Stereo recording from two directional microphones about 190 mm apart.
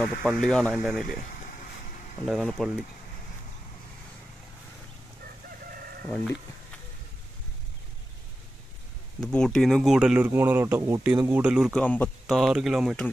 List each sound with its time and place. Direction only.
0.2 s speech: centre (ahead or behind)
1.0 s speech: 45° left (ahead or behind)
2.2 s speech: centre (ahead or behind)
6.0 s speech: 5° left (ahead or behind)
9.2 s speech: 5° left (ahead or behind)
11.8 s speech: 5° left (ahead or behind)